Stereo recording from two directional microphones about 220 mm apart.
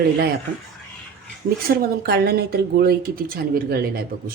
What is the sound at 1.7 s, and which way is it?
A woman's voice, 45° right (ahead or behind).